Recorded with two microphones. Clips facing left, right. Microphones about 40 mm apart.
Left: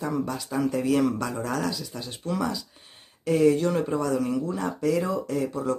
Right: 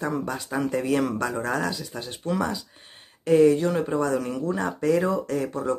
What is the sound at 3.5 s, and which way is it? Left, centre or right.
Speech, centre.